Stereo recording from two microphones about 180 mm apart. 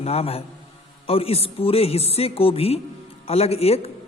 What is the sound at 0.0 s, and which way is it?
A man's voice, 35° left (ahead or behind).